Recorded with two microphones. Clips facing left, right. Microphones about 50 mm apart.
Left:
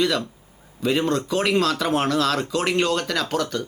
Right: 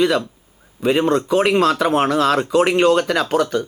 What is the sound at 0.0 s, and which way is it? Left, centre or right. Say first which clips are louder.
Speech: right 5 dB; centre.